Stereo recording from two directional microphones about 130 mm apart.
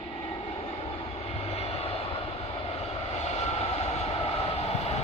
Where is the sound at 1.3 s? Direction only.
50° left (ahead or behind).